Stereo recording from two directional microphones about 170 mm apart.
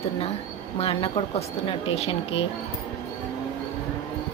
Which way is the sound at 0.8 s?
35° left (ahead or behind).